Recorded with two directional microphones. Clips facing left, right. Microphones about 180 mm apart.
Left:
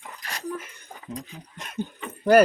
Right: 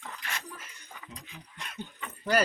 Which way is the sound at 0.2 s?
40° left (ahead or behind).